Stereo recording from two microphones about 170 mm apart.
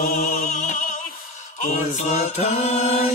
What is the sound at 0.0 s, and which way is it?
Music, 55° left (ahead or behind).